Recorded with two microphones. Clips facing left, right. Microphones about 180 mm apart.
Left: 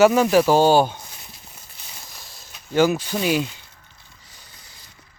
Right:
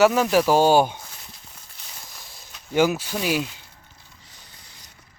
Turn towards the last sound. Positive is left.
turn(degrees=-5)  # may be behind; listen again after turning